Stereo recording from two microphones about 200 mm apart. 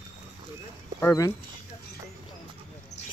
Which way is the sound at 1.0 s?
15° left (ahead or behind).